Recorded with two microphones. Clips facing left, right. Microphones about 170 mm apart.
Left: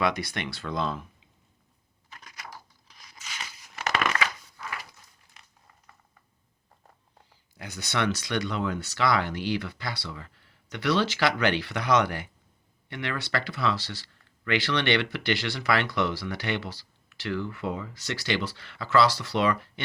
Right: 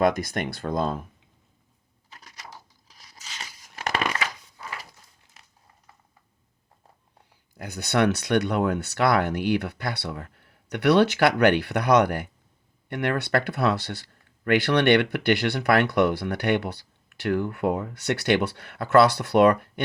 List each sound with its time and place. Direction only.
0.0 s speech: 50° right (ahead or behind)
2.8 s crunch: 40° right (ahead or behind)
4.0 s crumpling: 35° right (ahead or behind)
7.5 s speech: 55° right (ahead or behind)